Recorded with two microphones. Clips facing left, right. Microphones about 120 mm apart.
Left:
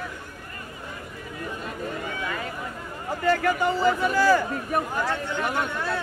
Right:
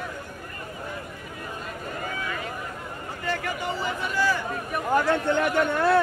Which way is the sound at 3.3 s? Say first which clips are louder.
Left 7 dB; 45° left (ahead or behind).